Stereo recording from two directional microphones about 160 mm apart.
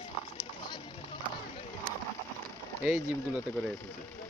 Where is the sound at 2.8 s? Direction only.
5° right (ahead or behind).